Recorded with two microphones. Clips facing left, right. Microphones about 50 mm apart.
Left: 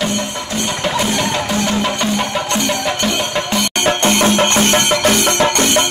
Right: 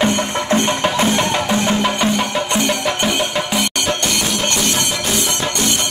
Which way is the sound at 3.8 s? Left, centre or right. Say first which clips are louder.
Left 6 dB; left.